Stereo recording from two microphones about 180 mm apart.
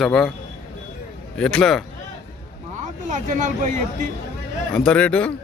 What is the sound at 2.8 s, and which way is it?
Speech, 45° right (ahead or behind).